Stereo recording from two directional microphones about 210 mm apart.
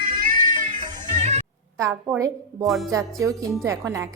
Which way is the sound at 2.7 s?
Centre (ahead or behind).